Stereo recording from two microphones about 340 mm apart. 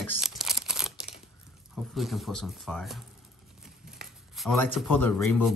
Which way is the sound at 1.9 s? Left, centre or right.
Centre.